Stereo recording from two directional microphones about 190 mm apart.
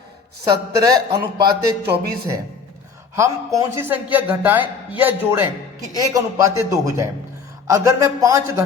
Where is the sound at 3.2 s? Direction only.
15° right (ahead or behind).